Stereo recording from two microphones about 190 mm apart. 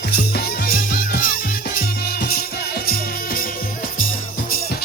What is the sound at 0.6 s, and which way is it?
Music, 50° left (ahead or behind).